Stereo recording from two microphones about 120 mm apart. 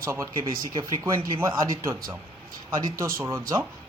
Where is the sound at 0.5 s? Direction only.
35° right (ahead or behind).